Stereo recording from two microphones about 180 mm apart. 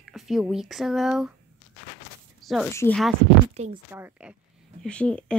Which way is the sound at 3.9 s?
10° right (ahead or behind).